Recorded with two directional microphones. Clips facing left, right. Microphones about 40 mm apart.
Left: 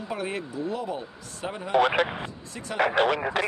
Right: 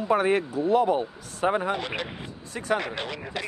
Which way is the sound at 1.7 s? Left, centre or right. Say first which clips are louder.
Left 9 dB; left.